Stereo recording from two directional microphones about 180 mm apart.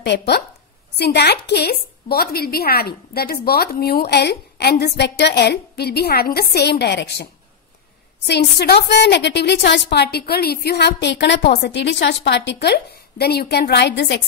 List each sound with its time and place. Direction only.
0.0 s a woman's voice: 70° left (ahead or behind)
8.3 s a woman's voice: 70° left (ahead or behind)